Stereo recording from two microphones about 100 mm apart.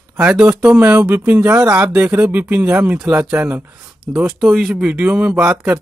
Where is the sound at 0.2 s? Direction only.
10° right (ahead or behind).